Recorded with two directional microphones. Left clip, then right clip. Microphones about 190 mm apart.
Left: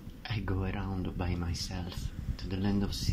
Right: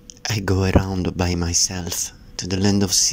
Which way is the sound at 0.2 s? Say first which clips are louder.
Right 15 dB; 60° right (ahead or behind).